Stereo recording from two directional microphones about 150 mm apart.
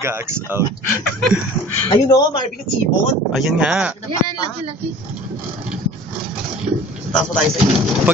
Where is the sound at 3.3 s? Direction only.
5° right (ahead or behind).